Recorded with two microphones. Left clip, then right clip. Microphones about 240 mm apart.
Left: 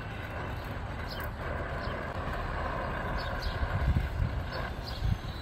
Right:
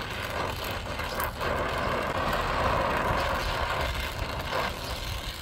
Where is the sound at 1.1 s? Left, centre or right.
Right.